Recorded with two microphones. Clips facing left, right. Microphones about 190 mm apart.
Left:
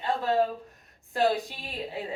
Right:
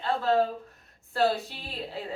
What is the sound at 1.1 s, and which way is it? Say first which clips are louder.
Speech: even; 15° left (ahead or behind).